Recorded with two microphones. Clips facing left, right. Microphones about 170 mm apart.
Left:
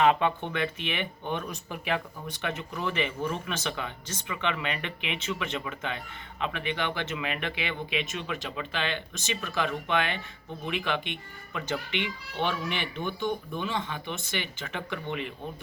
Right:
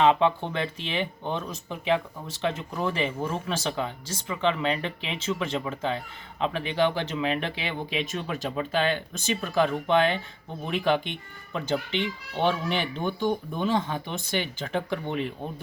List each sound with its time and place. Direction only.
0.0 s speech: 30° right (ahead or behind)